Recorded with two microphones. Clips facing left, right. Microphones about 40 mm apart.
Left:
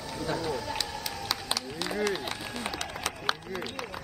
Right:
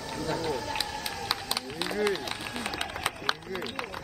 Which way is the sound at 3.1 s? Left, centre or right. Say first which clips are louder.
Left 2 dB; centre.